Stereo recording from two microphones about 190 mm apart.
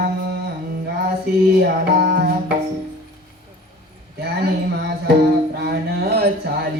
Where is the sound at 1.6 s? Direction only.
55° right (ahead or behind).